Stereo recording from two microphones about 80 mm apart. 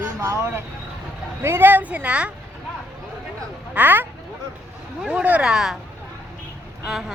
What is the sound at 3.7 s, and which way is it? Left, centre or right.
Speech, right.